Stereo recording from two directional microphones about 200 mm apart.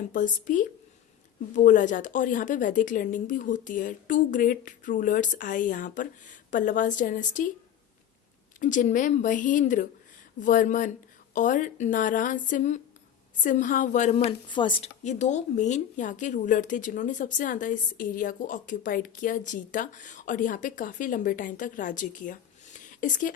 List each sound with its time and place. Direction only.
0.1 s speech: 40° left (ahead or behind)
8.5 s speech: 40° left (ahead or behind)